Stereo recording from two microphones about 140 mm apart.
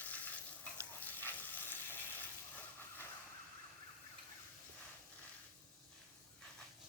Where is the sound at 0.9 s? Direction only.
15° left (ahead or behind).